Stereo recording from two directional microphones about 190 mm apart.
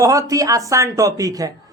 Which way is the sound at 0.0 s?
15° right (ahead or behind).